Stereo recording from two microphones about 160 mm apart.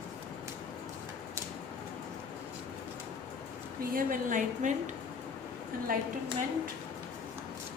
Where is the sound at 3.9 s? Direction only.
60° right (ahead or behind).